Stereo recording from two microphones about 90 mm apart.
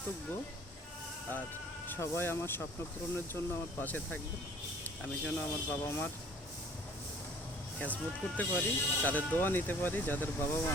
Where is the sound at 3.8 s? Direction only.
20° left (ahead or behind).